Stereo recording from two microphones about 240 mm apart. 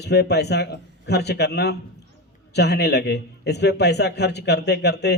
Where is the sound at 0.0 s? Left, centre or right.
Left.